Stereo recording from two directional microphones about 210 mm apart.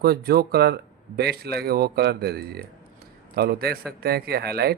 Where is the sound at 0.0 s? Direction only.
50° right (ahead or behind).